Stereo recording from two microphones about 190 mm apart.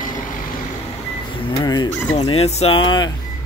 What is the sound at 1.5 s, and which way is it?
Speech, 20° left (ahead or behind).